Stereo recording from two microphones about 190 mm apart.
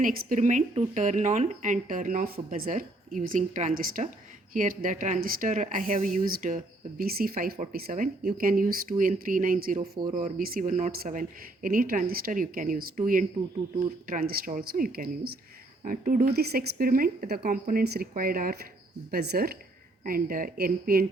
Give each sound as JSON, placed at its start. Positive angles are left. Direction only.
{"t": 0.0, "sound": "speech", "side_deg": -45}